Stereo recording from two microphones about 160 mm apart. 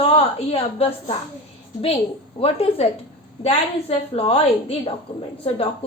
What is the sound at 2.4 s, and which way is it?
A woman's voice, 40° left (ahead or behind).